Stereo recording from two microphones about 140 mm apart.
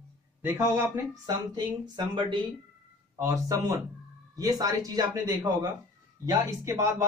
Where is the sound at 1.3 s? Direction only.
30° right (ahead or behind).